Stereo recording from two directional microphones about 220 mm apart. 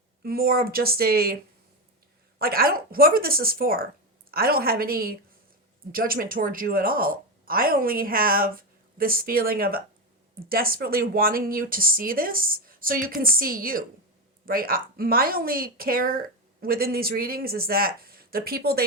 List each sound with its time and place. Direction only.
0.2 s speech: 40° right (ahead or behind)
2.4 s speech: 45° right (ahead or behind)